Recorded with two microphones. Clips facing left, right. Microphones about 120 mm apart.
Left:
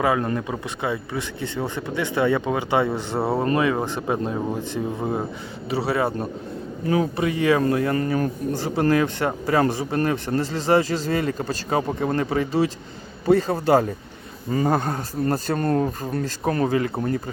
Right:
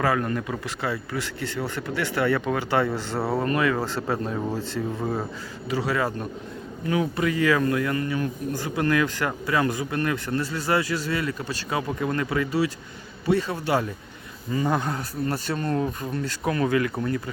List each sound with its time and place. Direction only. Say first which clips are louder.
0.0 s speech: left 2 dB; 20° left (ahead or behind)